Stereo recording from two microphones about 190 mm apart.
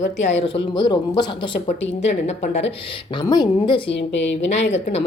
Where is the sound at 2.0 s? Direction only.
35° left (ahead or behind).